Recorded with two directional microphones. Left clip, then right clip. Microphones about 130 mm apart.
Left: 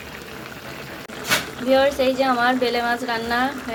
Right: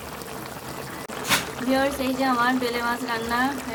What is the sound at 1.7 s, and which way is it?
A woman's voice, 25° left (ahead or behind).